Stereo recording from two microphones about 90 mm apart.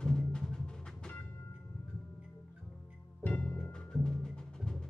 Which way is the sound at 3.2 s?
20° left (ahead or behind).